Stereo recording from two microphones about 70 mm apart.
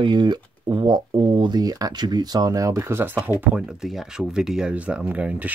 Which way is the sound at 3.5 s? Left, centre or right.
Centre.